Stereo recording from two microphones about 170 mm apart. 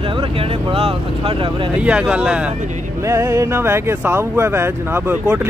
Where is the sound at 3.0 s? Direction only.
15° right (ahead or behind).